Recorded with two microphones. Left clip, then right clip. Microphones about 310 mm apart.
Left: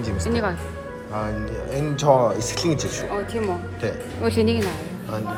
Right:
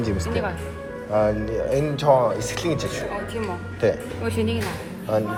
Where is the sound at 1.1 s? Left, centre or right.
Centre.